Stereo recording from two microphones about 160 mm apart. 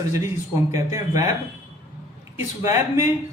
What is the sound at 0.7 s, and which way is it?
Speech, 20° right (ahead or behind).